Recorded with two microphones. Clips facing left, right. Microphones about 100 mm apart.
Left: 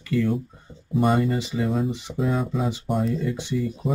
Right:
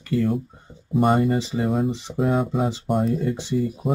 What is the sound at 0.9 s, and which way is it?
Speech, 40° right (ahead or behind).